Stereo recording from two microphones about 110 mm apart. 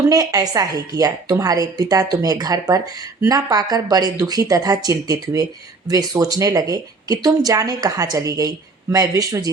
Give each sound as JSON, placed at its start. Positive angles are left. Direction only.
{"t": 0.1, "sound": "a woman's voice", "side_deg": -35}